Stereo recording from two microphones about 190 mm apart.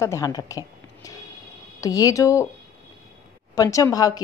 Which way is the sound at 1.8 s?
20° left (ahead or behind).